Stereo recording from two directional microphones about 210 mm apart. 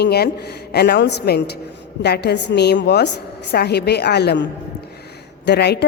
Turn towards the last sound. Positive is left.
turn(degrees=50)  # may be behind; listen again after turning